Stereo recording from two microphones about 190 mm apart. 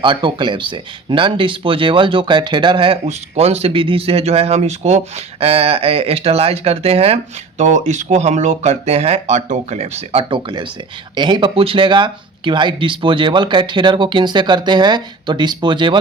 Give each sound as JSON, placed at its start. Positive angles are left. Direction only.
{"t": 0.0, "sound": "speech", "side_deg": -25}